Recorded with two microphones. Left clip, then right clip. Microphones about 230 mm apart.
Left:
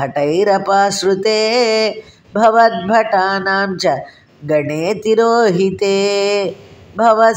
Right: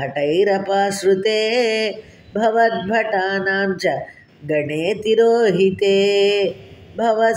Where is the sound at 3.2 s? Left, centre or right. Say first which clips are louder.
Left 4 dB; centre.